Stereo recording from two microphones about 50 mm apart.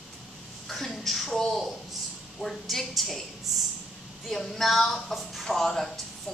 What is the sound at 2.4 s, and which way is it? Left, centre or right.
Speech, centre.